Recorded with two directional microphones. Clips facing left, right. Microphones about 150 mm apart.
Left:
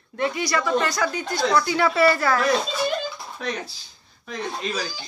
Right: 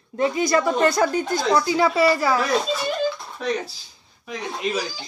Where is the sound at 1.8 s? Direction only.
15° right (ahead or behind).